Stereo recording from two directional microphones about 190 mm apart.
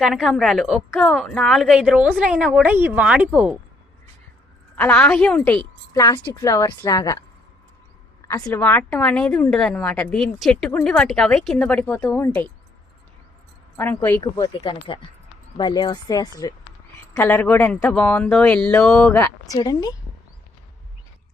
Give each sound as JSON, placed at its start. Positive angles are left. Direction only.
{"t": 0.0, "sound": "a woman's voice", "side_deg": 0}
{"t": 4.8, "sound": "a woman's voice", "side_deg": 10}
{"t": 8.3, "sound": "a woman's voice", "side_deg": 20}
{"t": 8.5, "sound": "a woman's voice", "side_deg": 10}
{"t": 13.7, "sound": "a woman's voice", "side_deg": 10}
{"t": 14.4, "sound": "a woman's voice", "side_deg": 25}
{"t": 19.5, "sound": "speech", "side_deg": 20}